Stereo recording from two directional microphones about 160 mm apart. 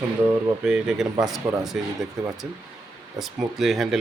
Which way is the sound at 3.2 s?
Centre (ahead or behind).